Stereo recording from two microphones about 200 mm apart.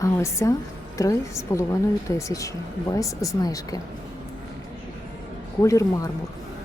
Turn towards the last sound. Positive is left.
turn(degrees=15)  # may be behind; listen again after turning